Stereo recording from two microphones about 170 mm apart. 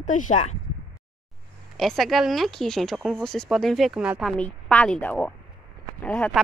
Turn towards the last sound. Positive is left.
turn(degrees=10)  # may be behind; listen again after turning